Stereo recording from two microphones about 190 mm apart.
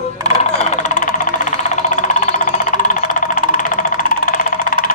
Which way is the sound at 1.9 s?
40° left (ahead or behind).